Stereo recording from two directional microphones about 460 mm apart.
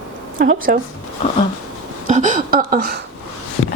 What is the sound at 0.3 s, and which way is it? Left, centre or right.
Speech, centre.